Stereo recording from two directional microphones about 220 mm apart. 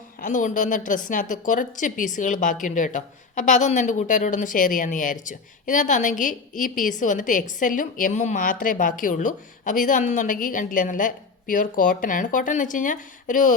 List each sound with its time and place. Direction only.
0.2 s a woman's voice: 35° left (ahead or behind)